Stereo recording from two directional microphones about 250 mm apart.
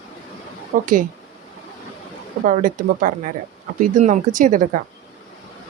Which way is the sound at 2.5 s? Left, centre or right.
Right.